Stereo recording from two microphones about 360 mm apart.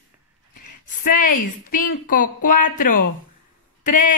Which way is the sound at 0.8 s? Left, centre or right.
Left.